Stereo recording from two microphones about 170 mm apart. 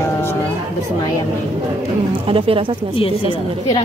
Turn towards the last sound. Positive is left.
turn(degrees=30)  # may be behind; listen again after turning